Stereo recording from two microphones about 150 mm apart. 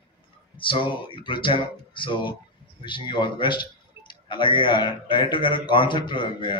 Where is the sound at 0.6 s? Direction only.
35° left (ahead or behind).